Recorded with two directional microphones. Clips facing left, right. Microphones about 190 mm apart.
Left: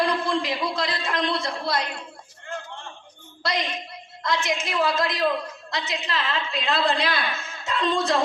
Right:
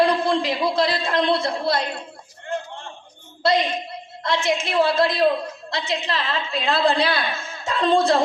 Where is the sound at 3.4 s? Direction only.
25° right (ahead or behind).